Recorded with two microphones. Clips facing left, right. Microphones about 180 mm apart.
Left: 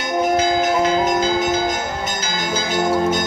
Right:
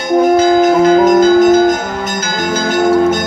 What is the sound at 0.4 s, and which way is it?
Music, 45° right (ahead or behind).